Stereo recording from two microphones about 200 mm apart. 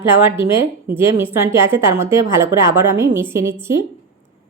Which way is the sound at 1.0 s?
15° right (ahead or behind).